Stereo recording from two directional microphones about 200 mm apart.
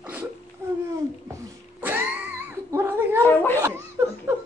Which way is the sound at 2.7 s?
10° right (ahead or behind).